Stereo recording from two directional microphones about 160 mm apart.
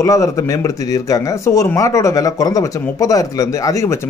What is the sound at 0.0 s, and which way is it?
Speech, 20° left (ahead or behind).